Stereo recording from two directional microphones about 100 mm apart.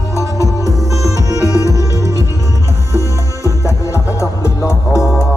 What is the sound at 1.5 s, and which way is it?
Music, 35° left (ahead or behind).